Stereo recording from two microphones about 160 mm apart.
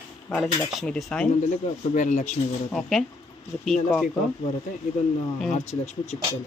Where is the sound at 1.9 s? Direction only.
50° left (ahead or behind).